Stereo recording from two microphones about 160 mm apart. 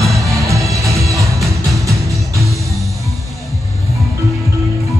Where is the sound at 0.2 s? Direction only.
20° right (ahead or behind).